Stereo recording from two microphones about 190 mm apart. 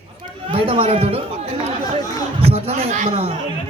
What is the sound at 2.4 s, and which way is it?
Speech, 30° right (ahead or behind).